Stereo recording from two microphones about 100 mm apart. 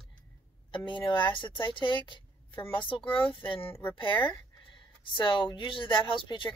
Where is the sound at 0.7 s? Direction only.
55° left (ahead or behind).